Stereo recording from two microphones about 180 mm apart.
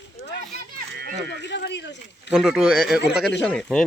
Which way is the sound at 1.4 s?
75° left (ahead or behind).